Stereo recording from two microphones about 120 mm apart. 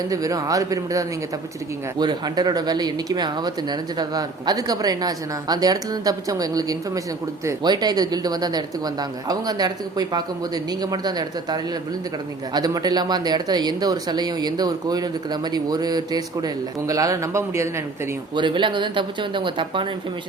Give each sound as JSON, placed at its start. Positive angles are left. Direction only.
{"t": 0.1, "sound": "speech", "side_deg": -30}
{"t": 18.3, "sound": "speech", "side_deg": -40}